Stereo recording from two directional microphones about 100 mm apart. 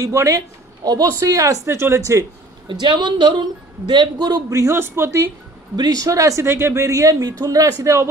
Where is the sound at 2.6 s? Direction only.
50° right (ahead or behind); by 5.3 s 25° right (ahead or behind).